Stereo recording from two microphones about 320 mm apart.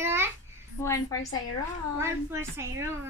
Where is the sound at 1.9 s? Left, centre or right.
Centre.